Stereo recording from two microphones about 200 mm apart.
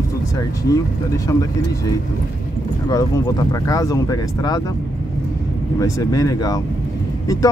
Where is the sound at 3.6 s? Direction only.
15° left (ahead or behind).